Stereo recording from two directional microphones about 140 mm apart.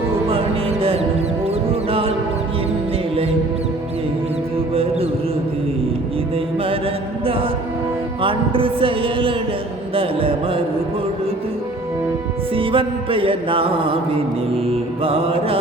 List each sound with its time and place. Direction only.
0.3 s music: 40° right (ahead or behind)
1.6 s a sound: 40° right (ahead or behind)
4.7 s music: 45° right (ahead or behind)
8.2 s music: 40° right (ahead or behind)
12.5 s music: 40° right (ahead or behind)